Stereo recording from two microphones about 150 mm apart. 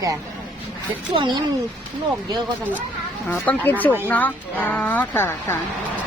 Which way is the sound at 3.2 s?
10° left (ahead or behind).